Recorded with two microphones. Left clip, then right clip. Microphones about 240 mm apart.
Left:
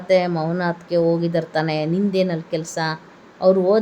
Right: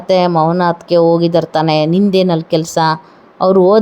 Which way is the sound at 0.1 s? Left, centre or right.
Right.